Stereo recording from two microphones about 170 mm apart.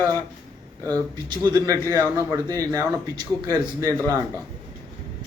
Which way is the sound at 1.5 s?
20° right (ahead or behind).